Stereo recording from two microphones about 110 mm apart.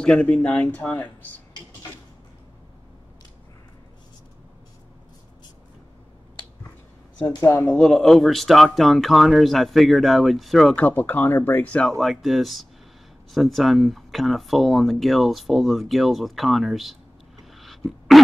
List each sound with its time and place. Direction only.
0.0 s speech: 10° left (ahead or behind)
7.6 s speech: 10° left (ahead or behind)
10.8 s speech: 15° left (ahead or behind)
12.0 s speech: centre (ahead or behind)
17.6 s a sound: centre (ahead or behind)